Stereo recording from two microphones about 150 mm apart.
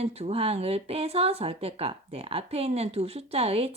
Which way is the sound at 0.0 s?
45° right (ahead or behind).